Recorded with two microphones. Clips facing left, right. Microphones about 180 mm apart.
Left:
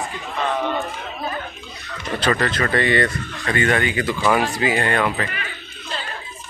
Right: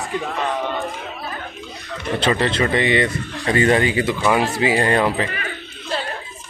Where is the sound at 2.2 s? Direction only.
25° right (ahead or behind).